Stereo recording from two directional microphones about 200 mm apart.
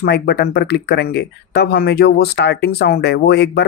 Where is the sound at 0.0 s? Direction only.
55° left (ahead or behind).